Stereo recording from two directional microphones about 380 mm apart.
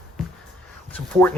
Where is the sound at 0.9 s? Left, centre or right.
Centre.